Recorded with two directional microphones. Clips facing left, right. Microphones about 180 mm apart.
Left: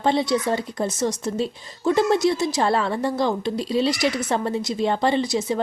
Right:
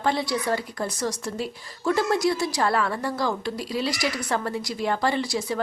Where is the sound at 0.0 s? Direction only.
25° left (ahead or behind).